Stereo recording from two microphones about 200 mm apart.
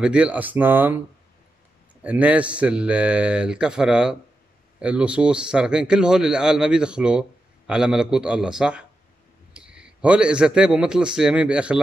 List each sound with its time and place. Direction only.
0.0 s speech: 5° right (ahead or behind)
2.0 s a man's voice: 5° right (ahead or behind)